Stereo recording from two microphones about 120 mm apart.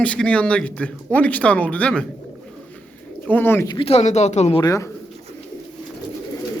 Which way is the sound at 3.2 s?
15° left (ahead or behind).